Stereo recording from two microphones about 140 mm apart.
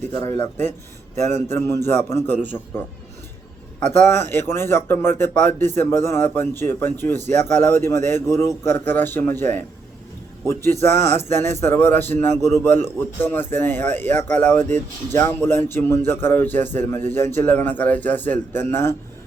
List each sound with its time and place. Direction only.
0.1 s speech: 20° left (ahead or behind)
1.5 s a man's voice: 20° left (ahead or behind)
4.0 s a man's voice: 15° left (ahead or behind)